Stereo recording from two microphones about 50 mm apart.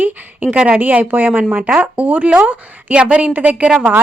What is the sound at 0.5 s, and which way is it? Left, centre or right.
Speech, right.